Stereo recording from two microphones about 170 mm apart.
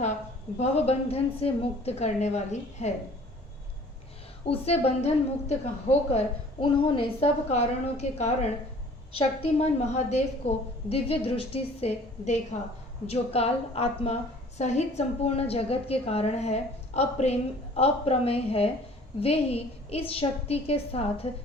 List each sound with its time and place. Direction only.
0.6 s a woman's voice: 40° left (ahead or behind)
4.4 s a woman's voice: 35° left (ahead or behind)